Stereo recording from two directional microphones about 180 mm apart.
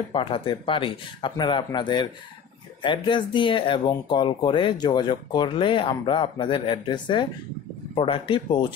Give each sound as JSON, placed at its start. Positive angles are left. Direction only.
{"t": 0.1, "sound": "speech", "side_deg": 30}